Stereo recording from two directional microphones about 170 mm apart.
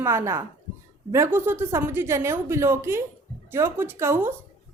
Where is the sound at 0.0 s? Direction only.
15° right (ahead or behind).